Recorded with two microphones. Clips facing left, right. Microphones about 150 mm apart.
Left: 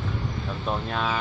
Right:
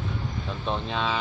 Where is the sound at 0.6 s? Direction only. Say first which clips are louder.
Even; 5° left (ahead or behind).